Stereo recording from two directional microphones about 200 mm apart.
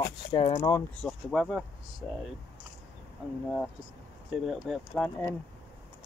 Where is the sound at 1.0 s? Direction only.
Centre (ahead or behind).